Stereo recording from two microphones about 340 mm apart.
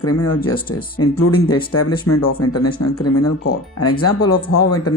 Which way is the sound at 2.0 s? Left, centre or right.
Left.